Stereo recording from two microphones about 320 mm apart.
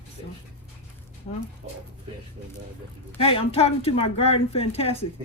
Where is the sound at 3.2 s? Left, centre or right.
Centre.